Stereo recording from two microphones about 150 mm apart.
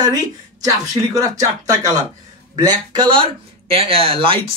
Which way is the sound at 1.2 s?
25° right (ahead or behind).